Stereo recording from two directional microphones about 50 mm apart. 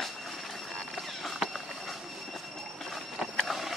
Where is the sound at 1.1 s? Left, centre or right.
Centre.